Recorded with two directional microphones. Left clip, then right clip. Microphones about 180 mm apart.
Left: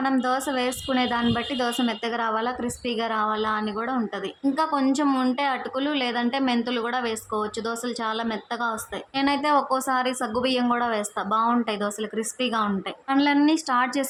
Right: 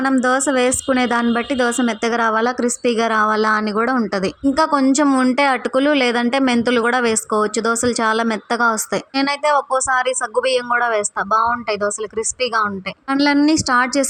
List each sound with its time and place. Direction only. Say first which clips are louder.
0.0 s a woman's voice: right 7 dB; 25° right (ahead or behind)
13.1 s a woman's voice: right 5 dB; 30° right (ahead or behind)